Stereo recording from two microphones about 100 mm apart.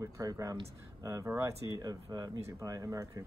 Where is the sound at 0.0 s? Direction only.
35° right (ahead or behind).